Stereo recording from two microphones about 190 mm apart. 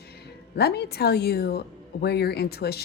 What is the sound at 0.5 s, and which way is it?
Speech, 60° left (ahead or behind).